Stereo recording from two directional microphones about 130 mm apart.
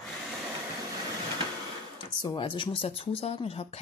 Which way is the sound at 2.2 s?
40° left (ahead or behind).